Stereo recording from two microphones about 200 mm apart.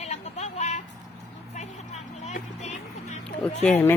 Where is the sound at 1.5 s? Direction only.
35° left (ahead or behind).